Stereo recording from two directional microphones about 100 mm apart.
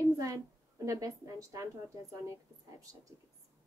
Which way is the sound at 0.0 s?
35° right (ahead or behind).